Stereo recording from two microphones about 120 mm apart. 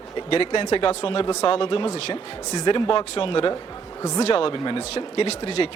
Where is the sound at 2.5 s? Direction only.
40° left (ahead or behind).